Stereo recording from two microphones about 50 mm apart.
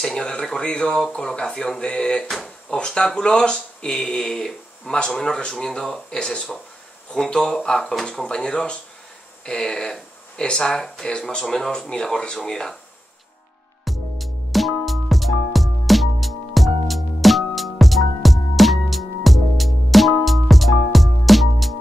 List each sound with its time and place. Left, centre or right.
0.0 s speech: centre
7.9 s speech: centre
13.8 s music: centre